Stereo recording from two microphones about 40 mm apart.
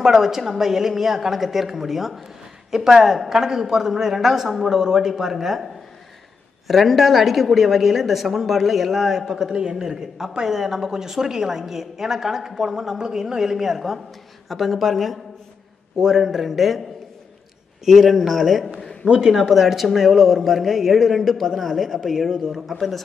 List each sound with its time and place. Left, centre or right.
0.0 s speech: centre
6.7 s a woman's voice: centre
17.8 s a woman's voice: centre
19.1 s a woman's voice: centre